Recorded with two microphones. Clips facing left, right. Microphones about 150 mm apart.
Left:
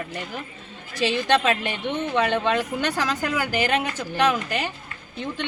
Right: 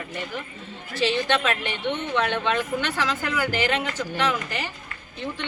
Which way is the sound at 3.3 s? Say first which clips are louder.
Even; 15° left (ahead or behind).